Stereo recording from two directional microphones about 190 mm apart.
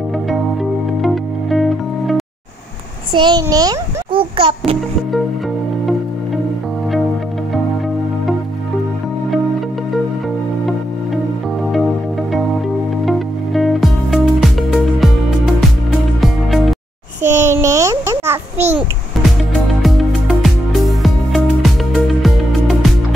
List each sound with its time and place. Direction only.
0.3 s music: centre (ahead or behind)
3.1 s a child's voice: 25° right (ahead or behind)
11.7 s music: centre (ahead or behind)
16.2 s music: centre (ahead or behind)
17.2 s a sound: 15° right (ahead or behind)
19.8 s music: centre (ahead or behind)